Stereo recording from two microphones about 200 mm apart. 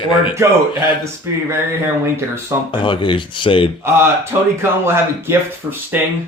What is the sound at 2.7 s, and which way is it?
Speech, 25° left (ahead or behind).